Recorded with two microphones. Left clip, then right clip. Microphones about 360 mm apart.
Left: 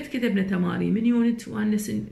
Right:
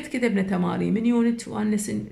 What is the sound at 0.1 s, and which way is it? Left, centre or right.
Speech, centre.